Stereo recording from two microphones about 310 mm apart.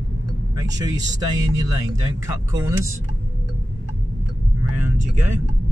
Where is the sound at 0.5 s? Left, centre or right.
Centre.